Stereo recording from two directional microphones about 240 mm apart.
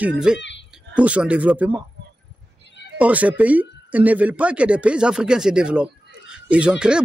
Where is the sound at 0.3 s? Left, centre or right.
Centre.